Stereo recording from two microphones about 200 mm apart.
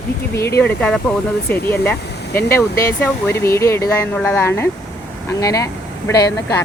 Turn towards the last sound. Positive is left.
turn(degrees=15)  # may be behind; listen again after turning